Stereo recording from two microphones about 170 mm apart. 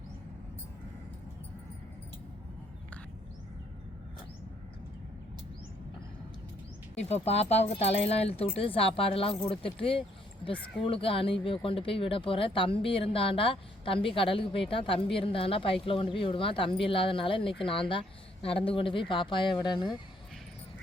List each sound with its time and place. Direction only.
6.9 s speech: 40° left (ahead or behind)